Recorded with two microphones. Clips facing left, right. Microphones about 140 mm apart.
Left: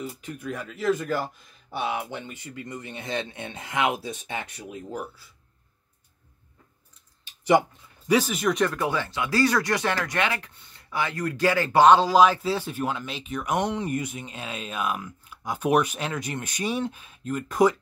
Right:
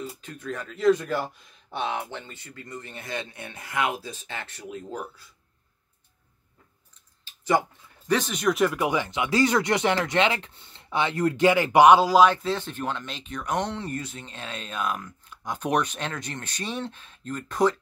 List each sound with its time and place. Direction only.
0.2 s speech: 10° left (ahead or behind)
7.2 s a sound: 15° left (ahead or behind)
8.1 s speech: 5° left (ahead or behind)
8.8 s speech: 15° right (ahead or behind); by 17.7 s 10° left (ahead or behind)